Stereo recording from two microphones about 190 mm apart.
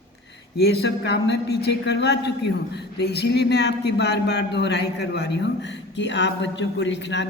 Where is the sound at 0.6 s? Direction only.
60° left (ahead or behind).